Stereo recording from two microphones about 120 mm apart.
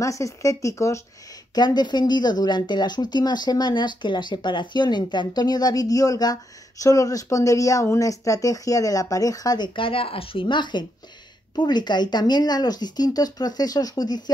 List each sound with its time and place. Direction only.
0.0 s speech: 25° left (ahead or behind)
1.5 s speech: 35° left (ahead or behind)
9.8 s speech: 50° left (ahead or behind)